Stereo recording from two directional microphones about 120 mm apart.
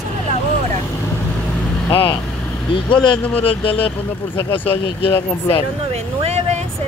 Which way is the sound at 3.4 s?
50° left (ahead or behind).